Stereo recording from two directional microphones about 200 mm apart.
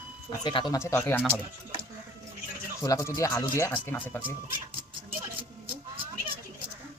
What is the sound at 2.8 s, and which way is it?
Speech, 15° left (ahead or behind).